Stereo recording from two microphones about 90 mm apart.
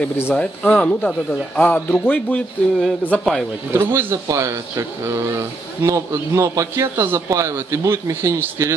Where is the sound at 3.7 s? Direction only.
25° right (ahead or behind).